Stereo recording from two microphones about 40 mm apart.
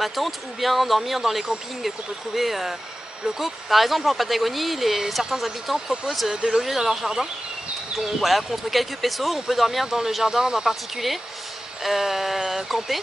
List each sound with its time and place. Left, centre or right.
0.0 s speech: centre
11.8 s speech: centre